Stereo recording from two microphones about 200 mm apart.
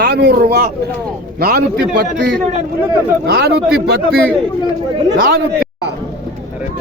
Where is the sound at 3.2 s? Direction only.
50° right (ahead or behind).